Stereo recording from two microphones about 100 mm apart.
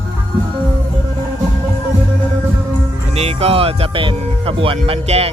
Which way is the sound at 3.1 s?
90° right.